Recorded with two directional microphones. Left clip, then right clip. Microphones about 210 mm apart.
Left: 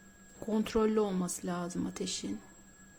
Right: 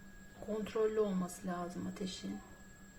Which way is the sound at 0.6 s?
55° left (ahead or behind).